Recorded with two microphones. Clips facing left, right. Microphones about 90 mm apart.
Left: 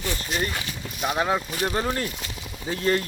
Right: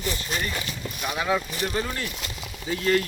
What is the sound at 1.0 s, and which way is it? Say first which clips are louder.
Speech: left 2 dB; 30° left (ahead or behind).